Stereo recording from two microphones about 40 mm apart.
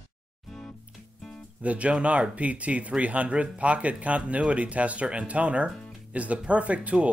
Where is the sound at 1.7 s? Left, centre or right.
Right.